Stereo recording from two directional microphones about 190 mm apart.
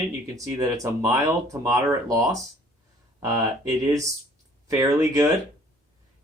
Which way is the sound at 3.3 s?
20° right (ahead or behind).